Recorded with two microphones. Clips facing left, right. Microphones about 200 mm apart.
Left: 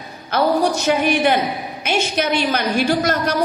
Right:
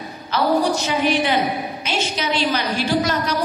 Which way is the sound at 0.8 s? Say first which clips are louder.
Left 3 dB; 55° left (ahead or behind).